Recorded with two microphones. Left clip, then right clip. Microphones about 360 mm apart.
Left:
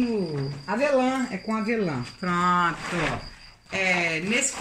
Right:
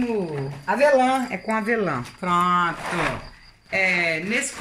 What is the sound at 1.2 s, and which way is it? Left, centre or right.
Speech, right.